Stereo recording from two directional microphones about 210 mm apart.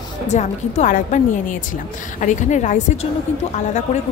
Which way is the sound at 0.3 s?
30° left (ahead or behind).